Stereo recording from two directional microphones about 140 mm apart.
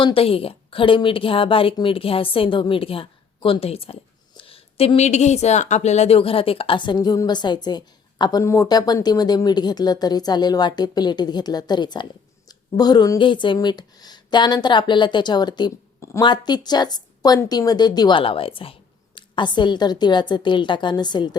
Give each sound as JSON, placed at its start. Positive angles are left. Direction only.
{"t": 0.0, "sound": "speech", "side_deg": 40}